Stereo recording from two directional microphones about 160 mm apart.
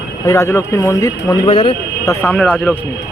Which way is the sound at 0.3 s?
15° left (ahead or behind).